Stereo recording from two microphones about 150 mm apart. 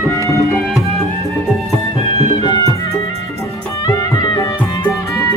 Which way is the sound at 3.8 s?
25° left (ahead or behind).